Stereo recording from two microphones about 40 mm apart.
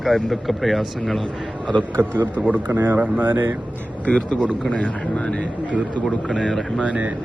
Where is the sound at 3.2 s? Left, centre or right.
Right.